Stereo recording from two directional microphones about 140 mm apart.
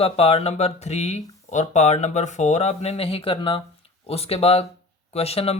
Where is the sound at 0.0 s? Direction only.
45° left (ahead or behind).